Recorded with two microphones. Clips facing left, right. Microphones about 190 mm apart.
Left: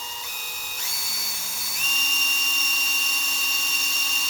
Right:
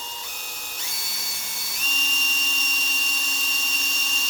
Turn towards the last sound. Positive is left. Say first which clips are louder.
# right 1 dB
turn(degrees=5)  # may be behind; listen again after turning